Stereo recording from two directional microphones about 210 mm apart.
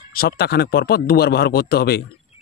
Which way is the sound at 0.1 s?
45° left (ahead or behind).